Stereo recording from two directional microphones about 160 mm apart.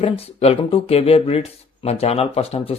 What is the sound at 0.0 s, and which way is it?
Speech, 40° left (ahead or behind).